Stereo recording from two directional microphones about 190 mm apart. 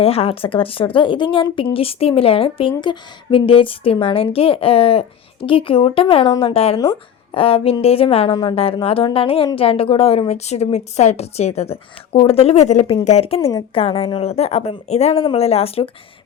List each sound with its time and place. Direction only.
0.0 s a woman's voice: 30° left (ahead or behind)
13.4 s speech: 20° left (ahead or behind)
13.7 s a woman's voice: 30° left (ahead or behind)